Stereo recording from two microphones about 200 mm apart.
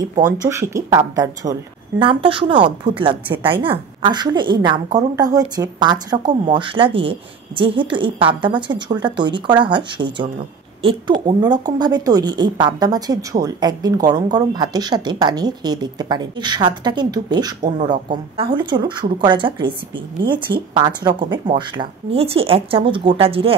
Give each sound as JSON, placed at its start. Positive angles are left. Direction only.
{"t": 0.2, "sound": "speech", "side_deg": -15}